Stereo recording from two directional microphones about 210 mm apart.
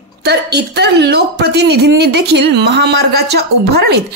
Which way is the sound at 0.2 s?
50° right (ahead or behind).